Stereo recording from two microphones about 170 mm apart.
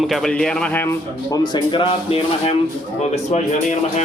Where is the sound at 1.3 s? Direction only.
25° left (ahead or behind).